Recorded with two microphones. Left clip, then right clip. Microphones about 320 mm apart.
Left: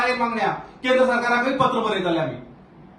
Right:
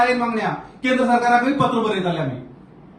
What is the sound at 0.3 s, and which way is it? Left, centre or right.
A man's voice, centre.